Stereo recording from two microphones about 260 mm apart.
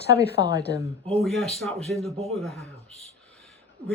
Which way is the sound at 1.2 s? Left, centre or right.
Centre.